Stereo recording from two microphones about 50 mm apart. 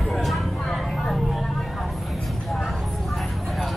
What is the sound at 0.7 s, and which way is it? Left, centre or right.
Vehicle, centre.